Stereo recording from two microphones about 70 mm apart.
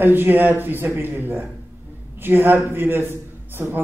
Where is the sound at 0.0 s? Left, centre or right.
Right.